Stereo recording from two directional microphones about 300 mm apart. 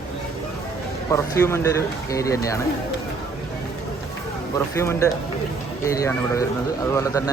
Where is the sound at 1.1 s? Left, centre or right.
Centre.